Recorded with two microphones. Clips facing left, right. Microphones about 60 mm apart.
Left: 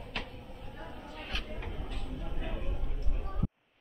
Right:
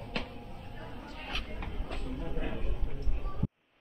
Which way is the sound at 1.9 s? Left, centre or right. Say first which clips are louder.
Right 3 dB; right.